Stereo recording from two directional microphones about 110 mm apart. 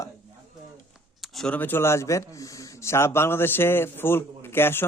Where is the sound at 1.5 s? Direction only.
20° left (ahead or behind).